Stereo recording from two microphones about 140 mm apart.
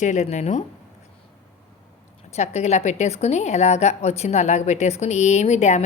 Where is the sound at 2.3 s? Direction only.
50° left (ahead or behind).